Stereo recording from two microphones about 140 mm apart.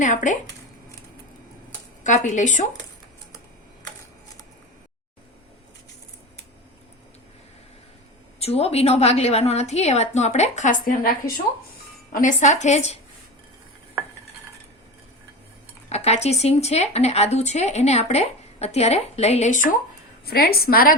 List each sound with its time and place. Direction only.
0.0 s a woman's voice: 65° left (ahead or behind)
2.0 s a woman's voice: 60° left (ahead or behind)
8.4 s speech: 45° left (ahead or behind); by 11.1 s 80° left
12.1 s a woman's voice: 65° left (ahead or behind)
15.9 s speech: 50° left (ahead or behind)
20.2 s a woman's voice: 90° left